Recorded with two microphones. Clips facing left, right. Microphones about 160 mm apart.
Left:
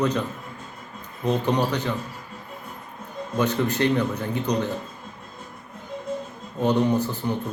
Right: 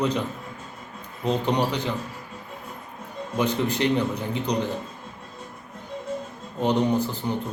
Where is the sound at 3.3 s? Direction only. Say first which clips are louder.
Left 1 dB; 15° right (ahead or behind).